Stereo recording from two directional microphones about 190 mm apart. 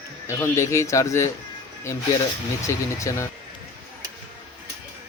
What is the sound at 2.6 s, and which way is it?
Speech, 15° left (ahead or behind).